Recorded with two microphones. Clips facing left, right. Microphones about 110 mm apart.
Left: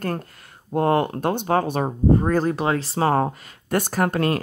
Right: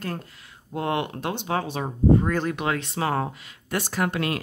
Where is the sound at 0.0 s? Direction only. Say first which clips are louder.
Left 5 dB; 50° left (ahead or behind).